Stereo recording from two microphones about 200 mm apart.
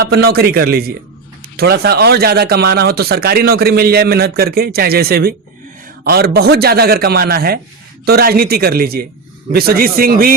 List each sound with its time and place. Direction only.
0.1 s speech: 50° right (ahead or behind)